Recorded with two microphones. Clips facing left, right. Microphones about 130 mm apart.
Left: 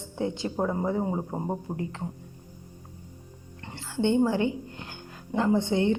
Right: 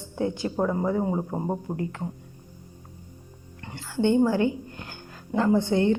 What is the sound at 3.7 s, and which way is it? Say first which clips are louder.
A woman's voice: right 2 dB; 25° left (ahead or behind).